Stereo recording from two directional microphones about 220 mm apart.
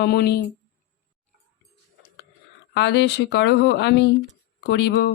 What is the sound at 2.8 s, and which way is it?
Speech, 50° left (ahead or behind).